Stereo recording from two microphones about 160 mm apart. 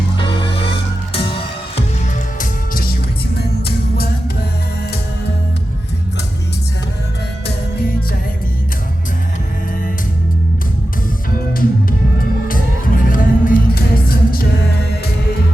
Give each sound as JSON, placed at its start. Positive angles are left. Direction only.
{"t": 1.1, "sound": "music", "side_deg": 35}
{"t": 2.4, "sound": "music", "side_deg": 65}
{"t": 11.9, "sound": "music", "side_deg": 65}